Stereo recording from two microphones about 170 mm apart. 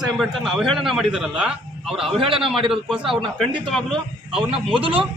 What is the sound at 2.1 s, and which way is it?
Speech, 30° right (ahead or behind).